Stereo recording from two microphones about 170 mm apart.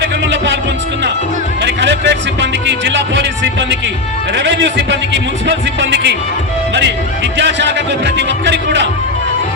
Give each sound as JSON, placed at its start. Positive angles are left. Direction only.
{"t": 0.0, "sound": "music", "side_deg": -90}
{"t": 1.6, "sound": "music", "side_deg": -90}
{"t": 4.4, "sound": "speech", "side_deg": -90}
{"t": 7.3, "sound": "speech", "side_deg": -90}